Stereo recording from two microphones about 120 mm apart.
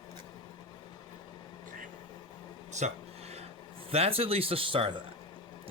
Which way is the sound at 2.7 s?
65° right (ahead or behind).